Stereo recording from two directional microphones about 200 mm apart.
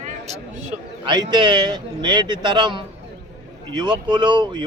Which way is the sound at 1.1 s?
20° right (ahead or behind).